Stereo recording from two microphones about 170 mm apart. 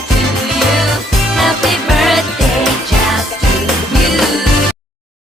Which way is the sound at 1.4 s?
Centre (ahead or behind).